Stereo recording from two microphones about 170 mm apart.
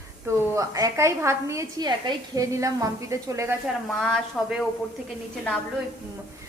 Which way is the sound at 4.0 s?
Centre (ahead or behind).